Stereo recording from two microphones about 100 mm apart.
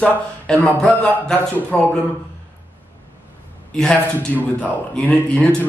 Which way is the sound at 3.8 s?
15° left (ahead or behind).